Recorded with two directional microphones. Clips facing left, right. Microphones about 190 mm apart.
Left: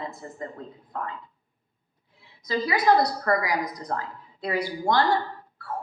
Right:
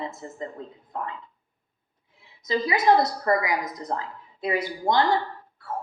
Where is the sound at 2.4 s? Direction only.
20° right (ahead or behind).